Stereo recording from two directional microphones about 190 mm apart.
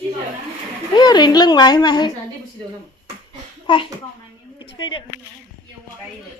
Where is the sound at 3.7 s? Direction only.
25° left (ahead or behind).